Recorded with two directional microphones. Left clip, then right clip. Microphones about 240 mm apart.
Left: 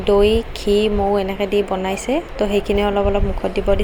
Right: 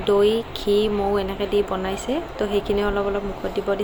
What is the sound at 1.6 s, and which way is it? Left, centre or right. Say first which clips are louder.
A woman's voice: left 4 dB; centre.